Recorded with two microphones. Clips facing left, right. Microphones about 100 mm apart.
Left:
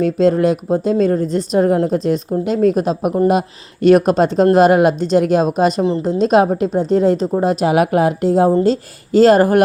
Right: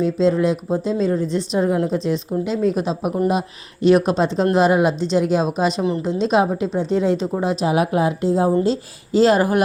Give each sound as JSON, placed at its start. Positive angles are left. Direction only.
{"t": 0.0, "sound": "speech", "side_deg": 55}
{"t": 5.8, "sound": "speech", "side_deg": 35}
{"t": 7.4, "sound": "a woman's voice", "side_deg": 60}
{"t": 8.6, "sound": "speech", "side_deg": 50}